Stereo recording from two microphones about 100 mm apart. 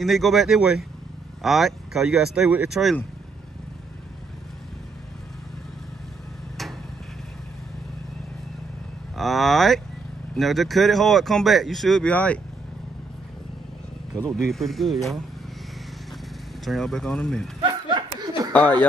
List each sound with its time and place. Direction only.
0.0 s speech: centre (ahead or behind)
9.1 s speech: centre (ahead or behind)
12.1 s speech: 15° left (ahead or behind)
14.1 s speech: 5° left (ahead or behind)
16.6 s speech: 5° left (ahead or behind)
17.6 s chuckle: 50° right (ahead or behind)
18.5 s speech: 15° left (ahead or behind)